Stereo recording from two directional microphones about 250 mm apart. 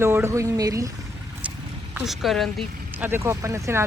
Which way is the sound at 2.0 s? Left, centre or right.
Centre.